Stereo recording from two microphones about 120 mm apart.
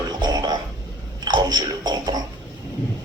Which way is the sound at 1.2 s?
35° right (ahead or behind).